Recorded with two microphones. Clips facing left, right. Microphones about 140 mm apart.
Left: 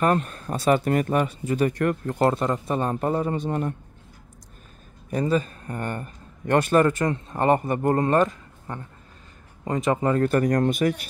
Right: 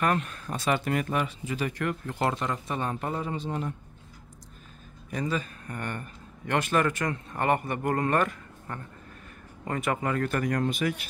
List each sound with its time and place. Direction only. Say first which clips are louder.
0.0 s speech: left 5 dB; 35° left (ahead or behind); by 3.7 s 55° left (ahead or behind)
5.1 s speech: left 7 dB; 40° left (ahead or behind)